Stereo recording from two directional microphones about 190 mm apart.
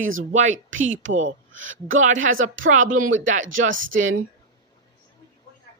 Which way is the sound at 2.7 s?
45° right (ahead or behind).